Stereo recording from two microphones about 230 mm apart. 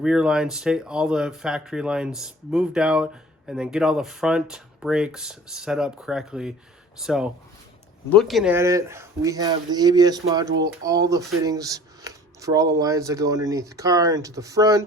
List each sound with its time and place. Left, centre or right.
0.0 s speech: centre
8.5 s speech: centre
11.4 s a sound: centre
12.8 s speech: centre